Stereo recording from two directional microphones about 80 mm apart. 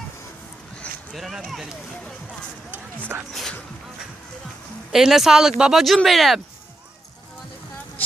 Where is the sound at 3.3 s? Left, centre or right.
Centre.